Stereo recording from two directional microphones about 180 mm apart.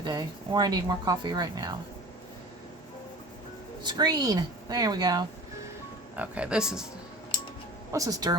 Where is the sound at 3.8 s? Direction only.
25° right (ahead or behind).